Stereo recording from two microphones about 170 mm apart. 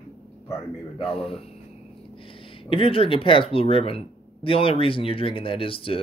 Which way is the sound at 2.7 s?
35° left (ahead or behind).